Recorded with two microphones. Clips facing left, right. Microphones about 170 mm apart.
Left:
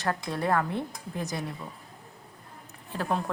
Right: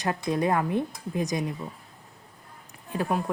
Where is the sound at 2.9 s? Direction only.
15° right (ahead or behind).